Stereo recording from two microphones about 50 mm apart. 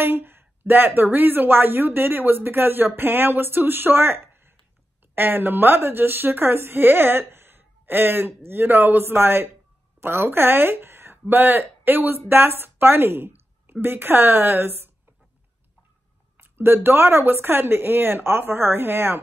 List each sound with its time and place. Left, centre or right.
0.0 s a woman's voice: right
16.3 s a woman's voice: right